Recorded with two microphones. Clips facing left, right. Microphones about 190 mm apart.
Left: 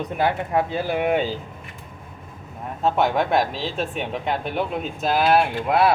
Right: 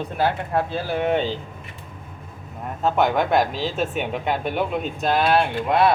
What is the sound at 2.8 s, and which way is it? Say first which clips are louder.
Speech: even; centre (ahead or behind).